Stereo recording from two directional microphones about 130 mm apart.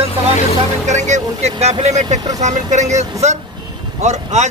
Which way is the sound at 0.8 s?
65° right (ahead or behind).